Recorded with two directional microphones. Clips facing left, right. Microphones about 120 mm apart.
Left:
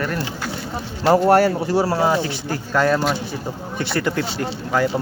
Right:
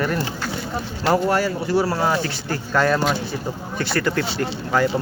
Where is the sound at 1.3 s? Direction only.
60° left (ahead or behind).